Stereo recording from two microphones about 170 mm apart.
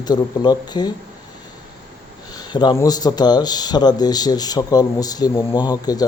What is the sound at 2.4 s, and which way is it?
Speech, 25° left (ahead or behind).